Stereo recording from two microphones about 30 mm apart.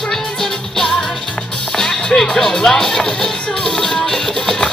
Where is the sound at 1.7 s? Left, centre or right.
Centre.